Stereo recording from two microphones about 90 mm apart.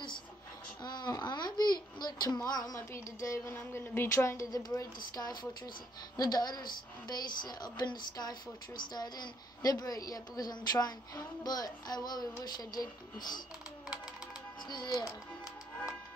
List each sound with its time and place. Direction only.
0.8 s babbling: 50° left (ahead or behind)
2.9 s a sound: 30° left (ahead or behind)
3.5 s a woman's voice: 20° left (ahead or behind); by 13.4 s 50° left (ahead or behind)
14.7 s a woman's voice: 50° left (ahead or behind)